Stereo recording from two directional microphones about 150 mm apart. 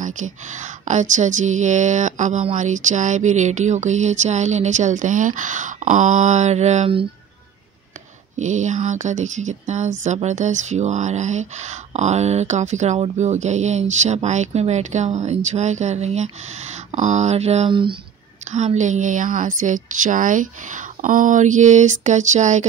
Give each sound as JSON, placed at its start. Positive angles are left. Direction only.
{"t": 0.0, "sound": "a woman's voice", "side_deg": -55}
{"t": 8.4, "sound": "a woman's voice", "side_deg": -55}